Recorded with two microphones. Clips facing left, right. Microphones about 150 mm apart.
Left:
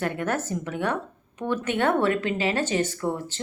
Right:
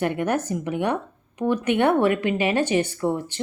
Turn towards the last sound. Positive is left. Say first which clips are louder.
# right 4 dB
turn(degrees=-15)  # may be behind; listen again after turning